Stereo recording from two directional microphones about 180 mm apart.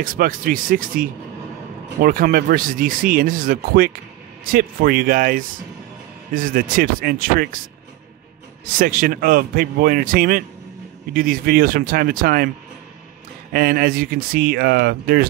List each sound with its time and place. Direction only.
0.0 s speech: 50° right (ahead or behind)
8.6 s speech: 50° right (ahead or behind)
13.5 s speech: 55° right (ahead or behind)